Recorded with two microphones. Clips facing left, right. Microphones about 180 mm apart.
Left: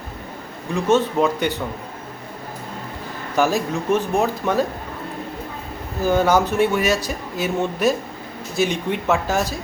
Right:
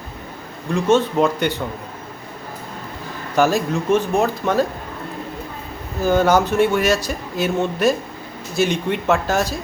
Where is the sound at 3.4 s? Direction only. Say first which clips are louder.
Right 2 dB; centre (ahead or behind).